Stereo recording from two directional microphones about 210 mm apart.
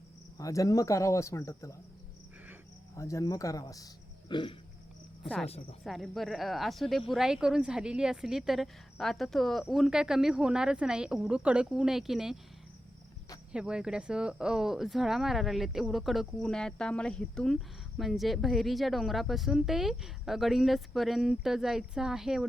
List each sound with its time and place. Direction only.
0.3 s speech: 15° left (ahead or behind)
2.9 s speech: 15° left (ahead or behind)
4.3 s a sound: 20° left (ahead or behind)
5.8 s speech: centre (ahead or behind)
13.5 s speech: 5° right (ahead or behind)